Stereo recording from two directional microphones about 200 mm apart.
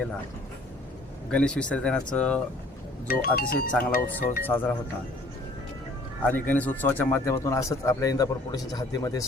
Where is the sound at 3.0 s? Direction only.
50° left (ahead or behind).